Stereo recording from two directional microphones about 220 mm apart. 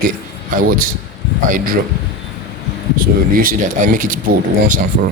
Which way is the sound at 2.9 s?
40° right (ahead or behind).